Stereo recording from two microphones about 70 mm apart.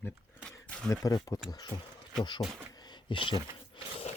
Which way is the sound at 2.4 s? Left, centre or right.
Centre.